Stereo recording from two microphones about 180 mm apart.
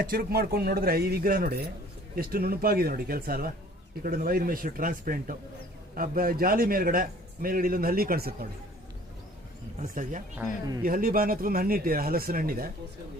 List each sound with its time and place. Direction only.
0.0 s a man's voice: 55° right (ahead or behind)
9.8 s a man's voice: 45° right (ahead or behind)